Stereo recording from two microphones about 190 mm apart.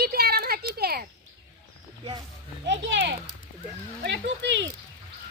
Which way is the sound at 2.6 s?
70° right (ahead or behind).